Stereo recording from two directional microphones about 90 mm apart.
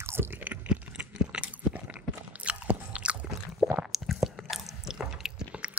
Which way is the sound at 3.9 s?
Centre (ahead or behind).